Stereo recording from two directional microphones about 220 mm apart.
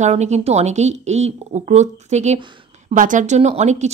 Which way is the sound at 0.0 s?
30° right (ahead or behind).